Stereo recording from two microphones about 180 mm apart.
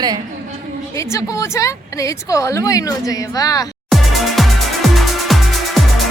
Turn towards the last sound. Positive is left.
turn(degrees=0)  # may be behind; listen again after turning